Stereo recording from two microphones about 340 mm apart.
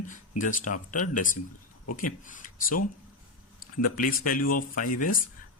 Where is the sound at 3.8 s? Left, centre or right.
Left.